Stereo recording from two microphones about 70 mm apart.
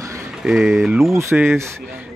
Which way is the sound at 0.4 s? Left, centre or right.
Centre.